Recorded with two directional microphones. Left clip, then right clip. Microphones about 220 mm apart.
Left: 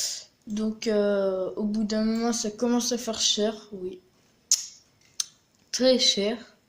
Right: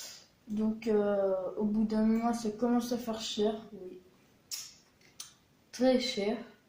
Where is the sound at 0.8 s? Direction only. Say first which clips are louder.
Left 5 dB; 50° left (ahead or behind).